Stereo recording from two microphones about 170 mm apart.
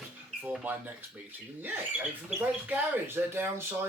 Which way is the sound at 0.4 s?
10° right (ahead or behind).